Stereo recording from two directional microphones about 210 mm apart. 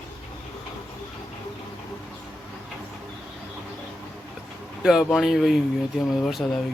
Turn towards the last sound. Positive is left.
turn(degrees=0)  # may be behind; listen again after turning